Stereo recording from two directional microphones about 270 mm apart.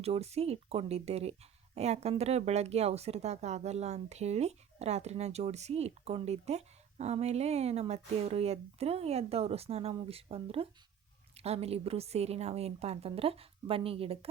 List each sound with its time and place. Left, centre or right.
0.0 s speech: right